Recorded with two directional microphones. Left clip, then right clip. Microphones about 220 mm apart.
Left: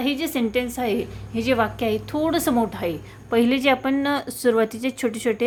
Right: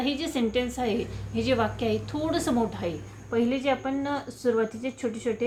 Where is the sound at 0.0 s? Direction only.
35° left (ahead or behind).